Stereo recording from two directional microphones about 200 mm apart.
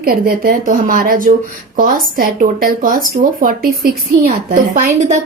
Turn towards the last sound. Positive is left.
turn(degrees=-40)  # may be behind; listen again after turning